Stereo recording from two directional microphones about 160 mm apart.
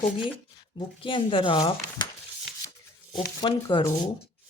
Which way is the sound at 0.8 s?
30° left (ahead or behind).